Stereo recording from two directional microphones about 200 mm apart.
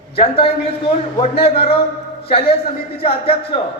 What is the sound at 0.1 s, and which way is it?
A man's voice, 30° left (ahead or behind).